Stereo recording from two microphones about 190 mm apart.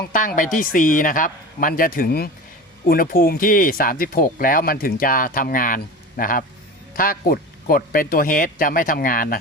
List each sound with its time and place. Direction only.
0.1 s speech: 45° left (ahead or behind)